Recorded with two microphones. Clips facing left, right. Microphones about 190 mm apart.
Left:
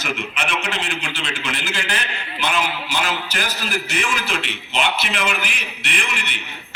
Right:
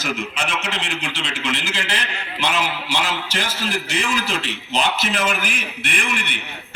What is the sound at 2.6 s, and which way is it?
Speech, 90° right.